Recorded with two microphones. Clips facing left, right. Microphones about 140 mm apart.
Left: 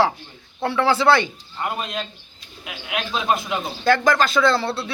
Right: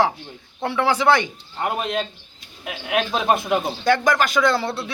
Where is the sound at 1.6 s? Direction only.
55° right (ahead or behind).